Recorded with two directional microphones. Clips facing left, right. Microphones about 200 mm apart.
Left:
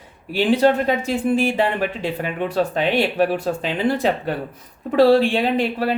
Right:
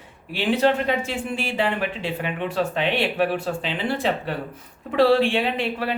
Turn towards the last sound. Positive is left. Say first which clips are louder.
# left 5 dB
turn(degrees=35)  # may be behind; listen again after turning